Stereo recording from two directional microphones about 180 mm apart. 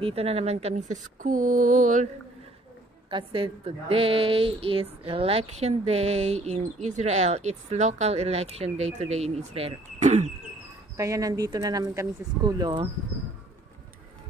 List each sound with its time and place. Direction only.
0.0 s a woman's voice: 35° right (ahead or behind)
1.2 s mantra: 45° right (ahead or behind)
3.1 s a woman's voice: 25° right (ahead or behind)
11.0 s speech: 20° right (ahead or behind)